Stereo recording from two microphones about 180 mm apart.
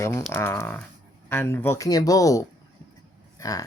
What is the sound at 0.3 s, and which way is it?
Speech, 15° left (ahead or behind).